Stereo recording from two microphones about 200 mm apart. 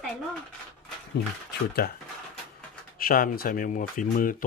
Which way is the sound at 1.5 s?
50° left (ahead or behind).